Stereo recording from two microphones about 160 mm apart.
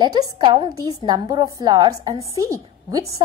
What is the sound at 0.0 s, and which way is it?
Speech, 25° right (ahead or behind).